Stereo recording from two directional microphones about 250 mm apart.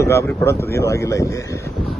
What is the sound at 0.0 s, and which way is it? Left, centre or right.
A man's voice, centre.